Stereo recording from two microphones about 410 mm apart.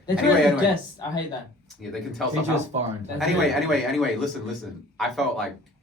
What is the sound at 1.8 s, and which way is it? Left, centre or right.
Speech, centre.